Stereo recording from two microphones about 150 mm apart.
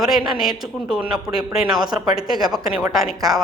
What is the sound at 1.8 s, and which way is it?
Speech, 30° right (ahead or behind).